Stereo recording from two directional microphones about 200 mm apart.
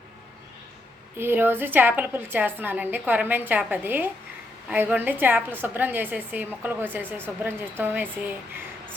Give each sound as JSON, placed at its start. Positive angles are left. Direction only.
{"t": 1.2, "sound": "a woman's voice", "side_deg": -10}